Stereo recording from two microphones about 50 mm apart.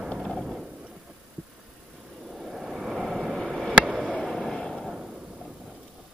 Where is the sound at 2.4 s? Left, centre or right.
Centre.